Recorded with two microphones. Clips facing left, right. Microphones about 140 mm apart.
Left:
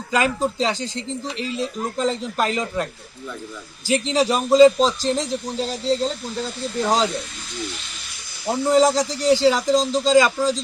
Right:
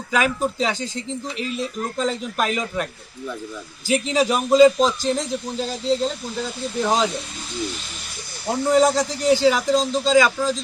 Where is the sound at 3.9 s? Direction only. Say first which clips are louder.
Even; 10° right (ahead or behind).